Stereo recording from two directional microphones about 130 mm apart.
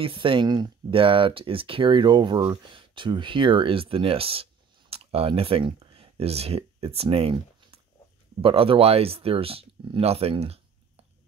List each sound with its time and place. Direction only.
0.0 s speech: 40° right (ahead or behind)